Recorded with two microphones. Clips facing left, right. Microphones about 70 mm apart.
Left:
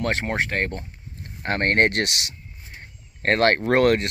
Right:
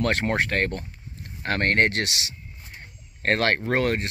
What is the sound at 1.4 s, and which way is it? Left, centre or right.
Speech, left.